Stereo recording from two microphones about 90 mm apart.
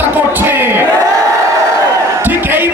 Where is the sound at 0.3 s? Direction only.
25° right (ahead or behind).